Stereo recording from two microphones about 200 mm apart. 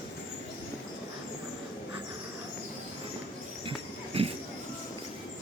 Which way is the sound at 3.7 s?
30° right (ahead or behind).